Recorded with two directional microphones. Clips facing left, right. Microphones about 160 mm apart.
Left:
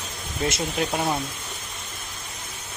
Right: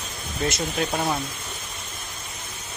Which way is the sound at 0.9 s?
5° left (ahead or behind).